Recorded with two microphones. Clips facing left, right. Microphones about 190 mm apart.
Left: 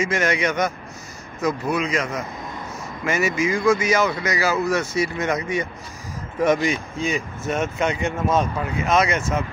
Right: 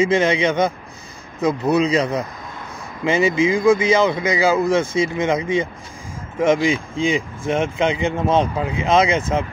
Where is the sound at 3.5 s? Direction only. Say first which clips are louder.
Right 3 dB; 15° right (ahead or behind).